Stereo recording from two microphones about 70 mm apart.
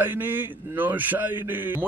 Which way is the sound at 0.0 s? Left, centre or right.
Right.